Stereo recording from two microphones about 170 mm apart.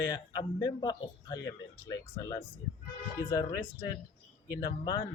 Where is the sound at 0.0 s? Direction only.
25° left (ahead or behind).